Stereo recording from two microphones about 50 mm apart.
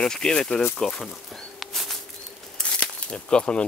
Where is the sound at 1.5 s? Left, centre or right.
Centre.